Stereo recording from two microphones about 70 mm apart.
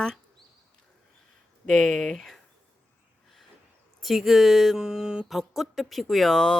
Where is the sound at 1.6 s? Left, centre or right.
Centre.